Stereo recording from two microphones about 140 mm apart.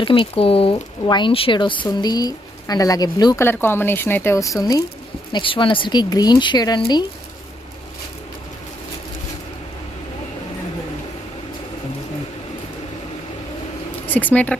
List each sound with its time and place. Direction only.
0.0 s speech: 40° left (ahead or behind)
3.3 s speech: 15° left (ahead or behind)
5.3 s speech: 35° left (ahead or behind)
14.1 s speech: 10° left (ahead or behind)